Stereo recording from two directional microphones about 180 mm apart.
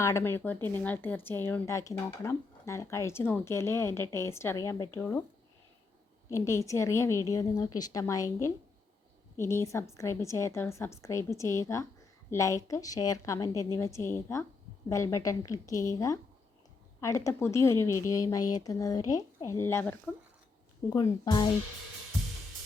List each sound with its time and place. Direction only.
0.0 s speech: 15° left (ahead or behind)
6.3 s a woman's voice: 15° left (ahead or behind)
20.9 s a woman's voice: 25° left (ahead or behind)